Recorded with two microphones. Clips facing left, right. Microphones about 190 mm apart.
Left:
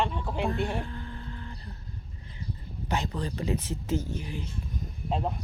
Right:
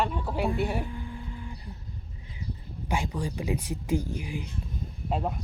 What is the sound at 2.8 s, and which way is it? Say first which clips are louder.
Speech: right 1 dB; 10° right (ahead or behind).